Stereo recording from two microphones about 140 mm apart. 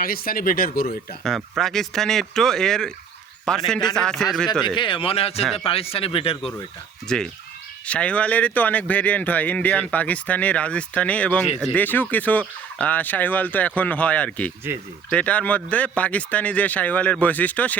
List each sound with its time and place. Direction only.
0.0 s speech: 90° left
1.5 s speech: centre (ahead or behind)
4.6 s speech: 35° left (ahead or behind)
7.1 s speech: 5° left (ahead or behind)